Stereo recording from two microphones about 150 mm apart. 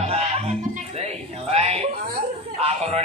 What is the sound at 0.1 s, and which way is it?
Music, 45° right (ahead or behind).